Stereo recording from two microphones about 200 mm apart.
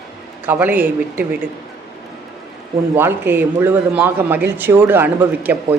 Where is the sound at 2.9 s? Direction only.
10° right (ahead or behind).